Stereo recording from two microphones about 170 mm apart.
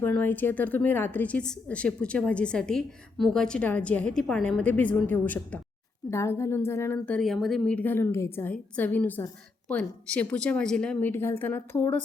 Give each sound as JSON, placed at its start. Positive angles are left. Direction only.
{"t": 0.0, "sound": "speech", "side_deg": 10}